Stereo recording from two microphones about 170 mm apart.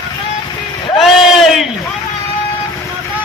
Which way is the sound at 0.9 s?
Centre (ahead or behind).